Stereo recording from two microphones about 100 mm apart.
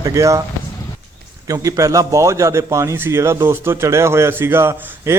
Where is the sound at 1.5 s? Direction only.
35° right (ahead or behind).